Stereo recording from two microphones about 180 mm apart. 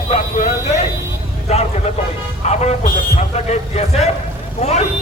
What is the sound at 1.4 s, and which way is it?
A man's voice, 35° left (ahead or behind).